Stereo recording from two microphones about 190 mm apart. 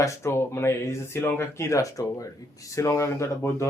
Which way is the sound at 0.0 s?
15° left (ahead or behind).